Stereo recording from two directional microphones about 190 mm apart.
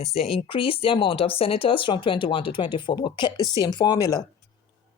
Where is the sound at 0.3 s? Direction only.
30° left (ahead or behind).